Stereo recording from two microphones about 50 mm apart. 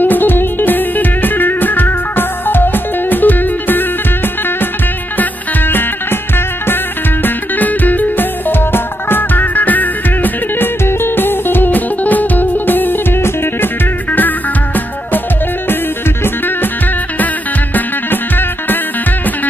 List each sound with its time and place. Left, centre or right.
0.0 s music: left
5.1 s music: left
7.2 s music: left
10.9 s music: left
17.7 s music: left